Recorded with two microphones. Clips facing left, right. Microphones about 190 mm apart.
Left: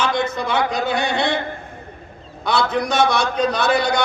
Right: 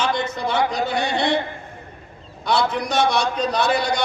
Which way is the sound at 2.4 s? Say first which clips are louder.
Left 1 dB; 50° left (ahead or behind).